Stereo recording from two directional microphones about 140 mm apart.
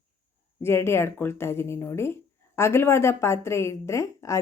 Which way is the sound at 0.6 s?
20° left (ahead or behind).